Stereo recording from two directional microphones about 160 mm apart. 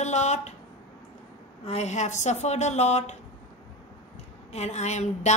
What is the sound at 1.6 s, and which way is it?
A woman's voice, 45° left (ahead or behind).